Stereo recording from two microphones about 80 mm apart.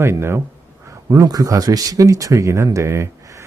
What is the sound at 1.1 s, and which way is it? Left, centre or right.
Speech, right.